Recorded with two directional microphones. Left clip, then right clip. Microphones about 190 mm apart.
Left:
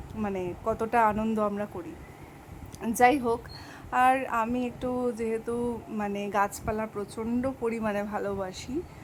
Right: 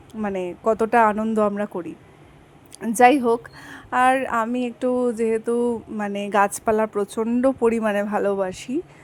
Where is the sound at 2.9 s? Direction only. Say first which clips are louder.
Right 7 dB; 25° right (ahead or behind).